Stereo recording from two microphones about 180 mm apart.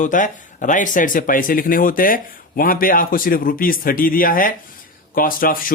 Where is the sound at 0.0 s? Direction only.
45° left (ahead or behind).